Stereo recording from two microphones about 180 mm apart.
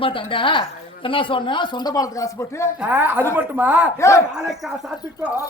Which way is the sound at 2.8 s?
10° right (ahead or behind).